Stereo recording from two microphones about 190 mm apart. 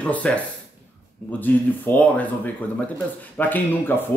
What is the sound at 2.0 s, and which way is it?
Speech, 10° left (ahead or behind).